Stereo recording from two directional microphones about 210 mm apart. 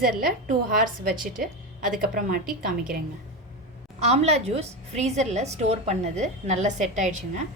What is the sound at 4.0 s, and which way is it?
A woman's voice, 30° right (ahead or behind).